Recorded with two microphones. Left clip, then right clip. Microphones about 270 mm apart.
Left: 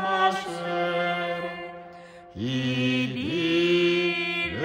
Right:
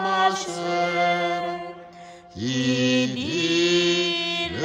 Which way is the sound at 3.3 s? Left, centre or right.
Centre.